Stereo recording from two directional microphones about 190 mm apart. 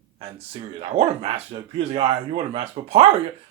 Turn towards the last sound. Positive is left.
turn(degrees=-30)  # may be behind; listen again after turning